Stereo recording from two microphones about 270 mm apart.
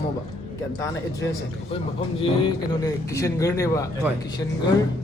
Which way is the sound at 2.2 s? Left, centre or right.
Centre.